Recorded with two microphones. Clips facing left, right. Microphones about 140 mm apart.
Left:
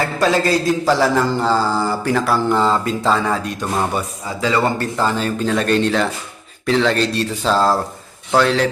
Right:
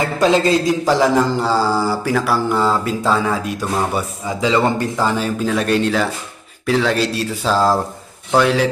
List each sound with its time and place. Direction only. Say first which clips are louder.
0.0 s speech: right 2 dB; 20° right (ahead or behind)
4.4 s speech: right 1 dB; 20° right (ahead or behind)